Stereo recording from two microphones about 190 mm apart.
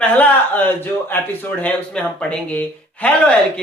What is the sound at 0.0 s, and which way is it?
A man's voice, 10° left (ahead or behind).